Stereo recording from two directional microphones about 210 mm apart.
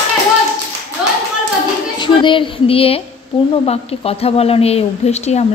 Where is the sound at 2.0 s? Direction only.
25° left (ahead or behind).